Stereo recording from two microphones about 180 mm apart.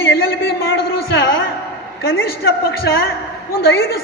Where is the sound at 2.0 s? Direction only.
75° left (ahead or behind); by 3.0 s 60° left (ahead or behind).